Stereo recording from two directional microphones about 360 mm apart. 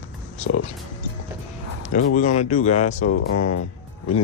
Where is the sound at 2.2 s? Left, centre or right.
Centre.